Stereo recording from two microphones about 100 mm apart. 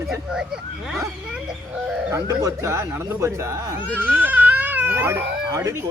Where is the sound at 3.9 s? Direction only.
20° right (ahead or behind).